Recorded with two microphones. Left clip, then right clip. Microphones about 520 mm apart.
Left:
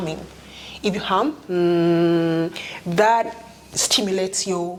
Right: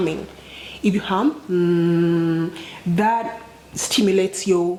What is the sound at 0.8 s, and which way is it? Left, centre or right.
Speech, left.